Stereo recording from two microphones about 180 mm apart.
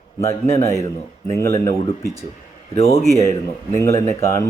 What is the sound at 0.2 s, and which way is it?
Speech, 15° left (ahead or behind).